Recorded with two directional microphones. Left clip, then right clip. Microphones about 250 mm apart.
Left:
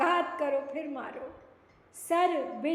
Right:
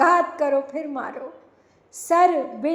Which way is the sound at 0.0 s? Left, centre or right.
Right.